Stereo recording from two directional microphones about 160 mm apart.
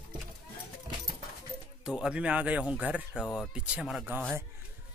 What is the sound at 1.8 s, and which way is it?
Speech, 5° right (ahead or behind).